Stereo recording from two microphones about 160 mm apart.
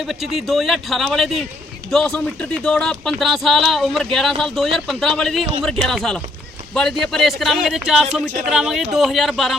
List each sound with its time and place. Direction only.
0.0 s speech: centre (ahead or behind)